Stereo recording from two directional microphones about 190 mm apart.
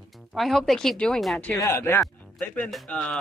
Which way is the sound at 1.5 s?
15° left (ahead or behind).